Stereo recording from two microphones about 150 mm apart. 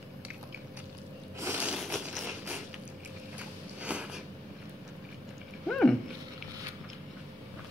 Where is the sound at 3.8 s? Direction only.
10° right (ahead or behind).